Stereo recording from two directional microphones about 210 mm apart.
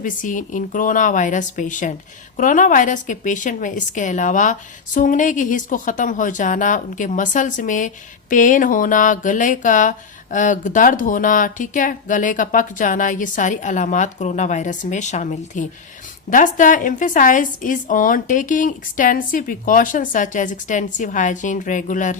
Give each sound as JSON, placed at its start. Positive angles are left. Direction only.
{"t": 0.0, "sound": "a woman's voice", "side_deg": 40}